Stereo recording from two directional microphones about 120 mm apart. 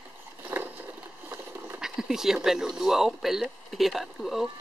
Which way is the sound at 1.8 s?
5° right (ahead or behind).